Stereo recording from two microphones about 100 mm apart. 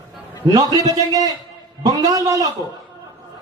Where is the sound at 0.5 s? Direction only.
35° right (ahead or behind).